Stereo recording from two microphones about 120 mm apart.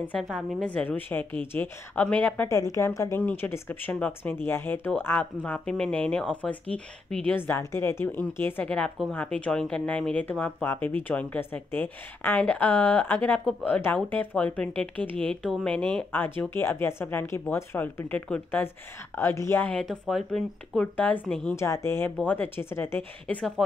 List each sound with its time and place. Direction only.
0.2 s a woman's voice: centre (ahead or behind)
0.7 s speech: 15° left (ahead or behind)
2.4 s speech: 25° left (ahead or behind)
19.7 s speech: 5° left (ahead or behind)